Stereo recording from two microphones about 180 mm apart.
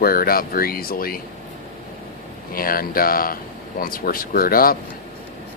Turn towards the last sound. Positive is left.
turn(degrees=55)  # may be behind; listen again after turning